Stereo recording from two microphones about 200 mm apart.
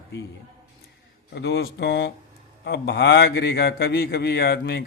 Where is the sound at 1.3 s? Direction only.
55° left (ahead or behind).